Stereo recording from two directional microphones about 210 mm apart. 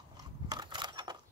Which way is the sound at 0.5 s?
20° right (ahead or behind).